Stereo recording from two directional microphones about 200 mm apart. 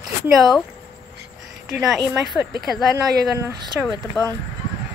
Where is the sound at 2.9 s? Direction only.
15° right (ahead or behind).